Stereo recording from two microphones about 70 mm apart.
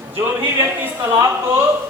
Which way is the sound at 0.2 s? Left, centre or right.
Right.